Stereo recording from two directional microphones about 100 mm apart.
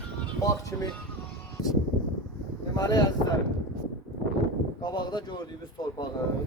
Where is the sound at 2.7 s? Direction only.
40° left (ahead or behind).